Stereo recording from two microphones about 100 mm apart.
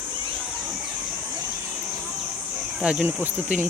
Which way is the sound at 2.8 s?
10° right (ahead or behind).